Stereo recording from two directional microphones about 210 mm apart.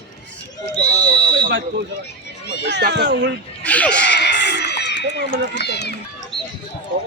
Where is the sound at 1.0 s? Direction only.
40° right (ahead or behind).